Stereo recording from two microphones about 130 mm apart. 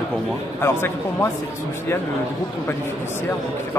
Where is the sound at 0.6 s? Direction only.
15° left (ahead or behind).